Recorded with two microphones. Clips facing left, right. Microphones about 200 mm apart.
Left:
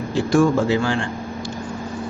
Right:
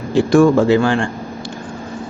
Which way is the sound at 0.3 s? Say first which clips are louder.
Right 5 dB; 60° right (ahead or behind).